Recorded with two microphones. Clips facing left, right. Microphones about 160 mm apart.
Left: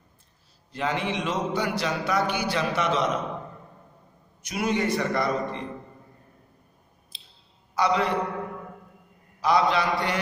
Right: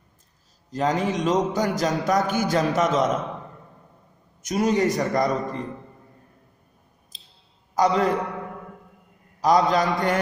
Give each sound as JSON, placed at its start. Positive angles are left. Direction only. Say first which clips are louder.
{"t": 0.7, "sound": "a man's voice", "louder": "right 5 dB", "side_deg": -40}
{"t": 4.4, "sound": "a man's voice", "louder": "right 5 dB", "side_deg": -40}
{"t": 7.1, "sound": "clicking", "louder": "left 1 dB", "side_deg": -40}
{"t": 7.7, "sound": "a man's voice", "louder": "right 3 dB", "side_deg": -40}
{"t": 9.4, "sound": "a man's voice", "louder": "right 3 dB", "side_deg": -40}